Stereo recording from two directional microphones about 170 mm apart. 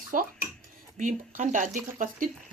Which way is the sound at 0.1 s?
50° right (ahead or behind).